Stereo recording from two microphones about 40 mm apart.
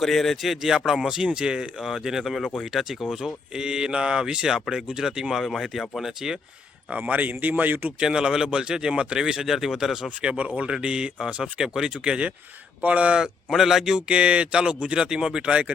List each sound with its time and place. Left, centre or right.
0.0 s speech: centre
0.4 s speech: centre
3.5 s speech: centre
5.3 s speech: centre
7.1 s speech: right
7.9 s speech: right
10.2 s speech: right
11.6 s speech: centre
12.0 s speech: right
13.5 s speech: centre
13.9 s speech: right